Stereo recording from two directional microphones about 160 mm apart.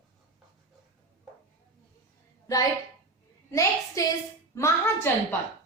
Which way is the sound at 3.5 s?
20° left (ahead or behind).